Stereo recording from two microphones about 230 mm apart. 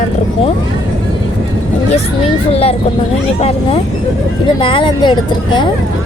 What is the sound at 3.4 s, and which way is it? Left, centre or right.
Speech, left.